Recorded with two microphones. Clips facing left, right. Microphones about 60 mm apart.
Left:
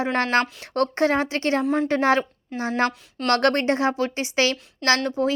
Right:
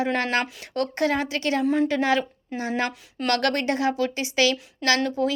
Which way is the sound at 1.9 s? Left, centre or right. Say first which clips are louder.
Left 3 dB; left.